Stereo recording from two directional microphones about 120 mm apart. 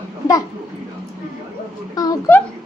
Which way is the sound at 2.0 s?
30° left (ahead or behind).